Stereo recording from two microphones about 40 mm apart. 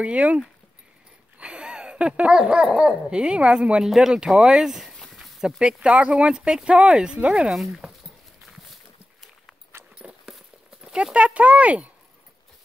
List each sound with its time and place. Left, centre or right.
0.0 s speech: right
1.4 s a sound: right
2.4 s speech: right
3.8 s speech: centre
5.6 s speech: right
6.3 s speech: centre
7.4 s speech: centre
9.9 s a sound: centre
10.8 s speech: right